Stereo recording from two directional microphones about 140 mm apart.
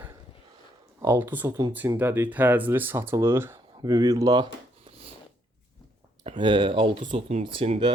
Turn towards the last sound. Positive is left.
turn(degrees=-40)  # may be behind; listen again after turning